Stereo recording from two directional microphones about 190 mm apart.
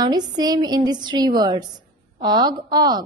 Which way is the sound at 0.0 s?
20° right (ahead or behind).